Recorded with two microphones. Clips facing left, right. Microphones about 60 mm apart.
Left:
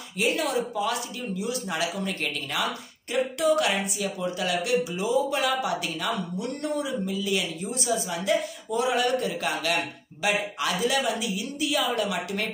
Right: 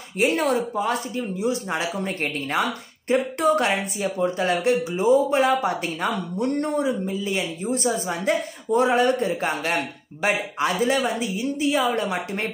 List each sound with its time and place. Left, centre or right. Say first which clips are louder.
0.2 s speech: right 5 dB; right